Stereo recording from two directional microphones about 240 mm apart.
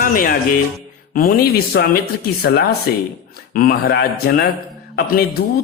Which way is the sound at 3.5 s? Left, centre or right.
Left.